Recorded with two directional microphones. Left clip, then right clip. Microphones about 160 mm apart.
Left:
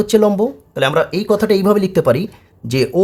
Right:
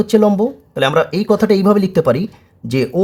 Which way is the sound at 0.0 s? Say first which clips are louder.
Even; 5° right (ahead or behind).